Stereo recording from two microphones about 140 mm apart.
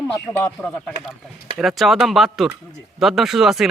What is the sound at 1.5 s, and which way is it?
Speech, centre (ahead or behind).